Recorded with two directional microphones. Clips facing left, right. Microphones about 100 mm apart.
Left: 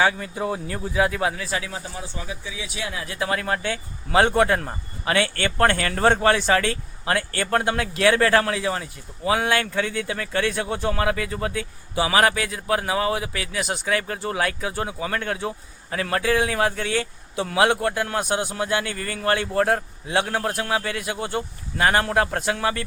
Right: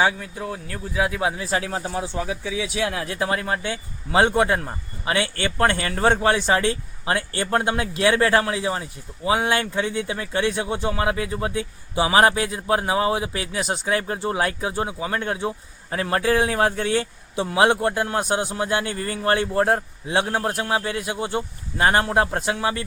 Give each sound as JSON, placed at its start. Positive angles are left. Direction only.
{"t": 0.2, "sound": "speech", "side_deg": 10}
{"t": 1.0, "sound": "speech", "side_deg": -10}
{"t": 1.4, "sound": "speech", "side_deg": -40}
{"t": 1.8, "sound": "speech", "side_deg": -70}
{"t": 3.2, "sound": "speech", "side_deg": -25}